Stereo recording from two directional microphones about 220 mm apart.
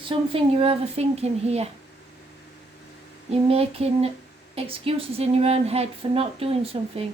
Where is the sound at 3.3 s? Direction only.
25° right (ahead or behind).